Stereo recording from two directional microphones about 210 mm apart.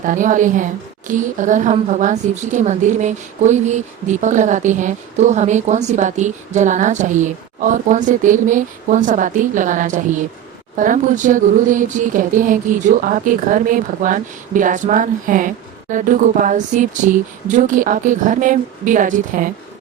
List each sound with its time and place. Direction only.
0.0 s a woman's voice: 40° right (ahead or behind)